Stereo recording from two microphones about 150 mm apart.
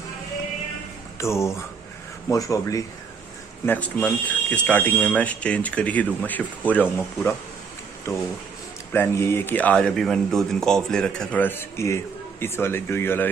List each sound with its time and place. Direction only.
1.2 s speech: 20° left (ahead or behind)
3.6 s a man's voice: 10° left (ahead or behind)
8.9 s a man's voice: 15° left (ahead or behind)